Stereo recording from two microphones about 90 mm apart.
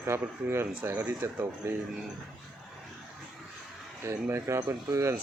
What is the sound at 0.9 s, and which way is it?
Speech, 20° right (ahead or behind).